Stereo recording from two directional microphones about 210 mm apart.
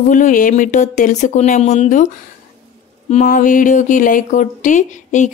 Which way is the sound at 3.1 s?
35° left (ahead or behind).